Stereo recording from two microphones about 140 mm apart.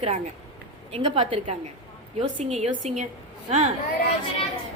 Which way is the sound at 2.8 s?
60° right (ahead or behind).